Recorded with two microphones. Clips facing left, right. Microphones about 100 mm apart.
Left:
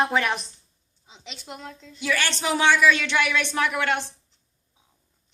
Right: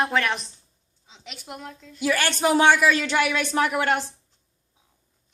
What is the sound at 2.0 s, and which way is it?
A woman's voice, 40° right (ahead or behind).